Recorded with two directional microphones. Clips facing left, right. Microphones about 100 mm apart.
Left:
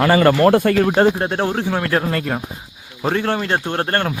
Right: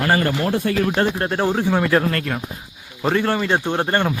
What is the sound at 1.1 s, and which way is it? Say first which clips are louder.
Speech: left 1 dB; 5° left (ahead or behind).